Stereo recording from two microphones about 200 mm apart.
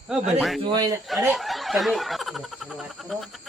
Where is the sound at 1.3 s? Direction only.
Centre (ahead or behind).